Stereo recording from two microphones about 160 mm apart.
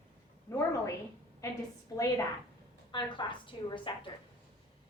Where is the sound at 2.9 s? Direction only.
30° left (ahead or behind).